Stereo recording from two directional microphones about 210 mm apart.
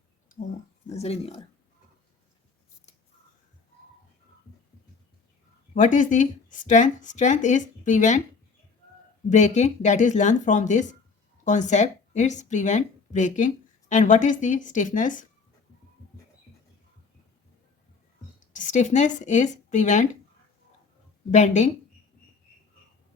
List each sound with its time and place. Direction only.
0.9 s speech: 30° left (ahead or behind)
5.7 s speech: 35° left (ahead or behind)
9.3 s speech: 35° left (ahead or behind)
18.5 s speech: 35° left (ahead or behind)
21.2 s speech: 35° left (ahead or behind)